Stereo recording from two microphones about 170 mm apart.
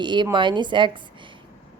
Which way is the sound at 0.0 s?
25° right (ahead or behind).